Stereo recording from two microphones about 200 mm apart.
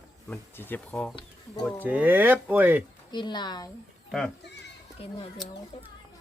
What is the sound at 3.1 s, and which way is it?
Speech, 20° left (ahead or behind).